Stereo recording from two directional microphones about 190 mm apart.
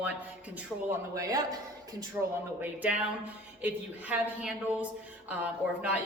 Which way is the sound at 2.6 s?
10° right (ahead or behind).